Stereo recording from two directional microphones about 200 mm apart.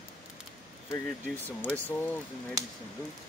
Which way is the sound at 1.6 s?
10° left (ahead or behind).